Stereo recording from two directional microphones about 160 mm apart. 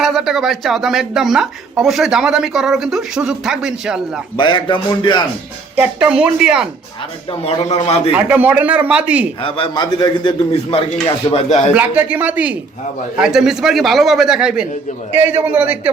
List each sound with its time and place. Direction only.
0.0 s a woman's voice: centre (ahead or behind)
4.4 s a man's voice: 30° left (ahead or behind)
5.7 s a woman's voice: 10° right (ahead or behind)
7.3 s a man's voice: 40° left (ahead or behind)
8.1 s a man's voice: 10° right (ahead or behind)
9.4 s a man's voice: 35° left (ahead or behind)
11.7 s a man's voice: 10° right (ahead or behind)